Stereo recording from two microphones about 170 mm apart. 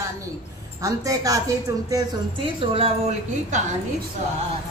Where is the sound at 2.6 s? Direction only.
35° right (ahead or behind).